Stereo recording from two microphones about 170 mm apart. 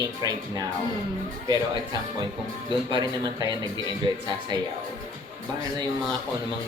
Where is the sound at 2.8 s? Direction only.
25° right (ahead or behind).